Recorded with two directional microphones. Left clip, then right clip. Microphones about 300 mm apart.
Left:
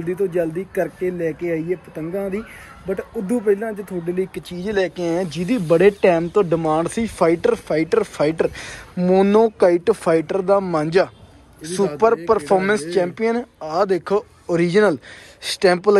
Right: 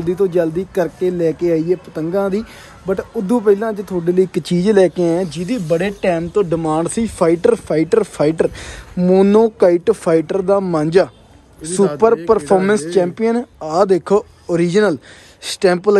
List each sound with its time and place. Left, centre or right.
0.0 s speech: centre